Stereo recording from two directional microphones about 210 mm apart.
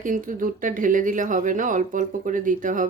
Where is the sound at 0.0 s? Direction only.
40° right (ahead or behind).